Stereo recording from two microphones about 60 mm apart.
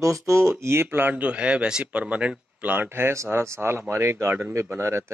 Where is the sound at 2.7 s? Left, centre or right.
Right.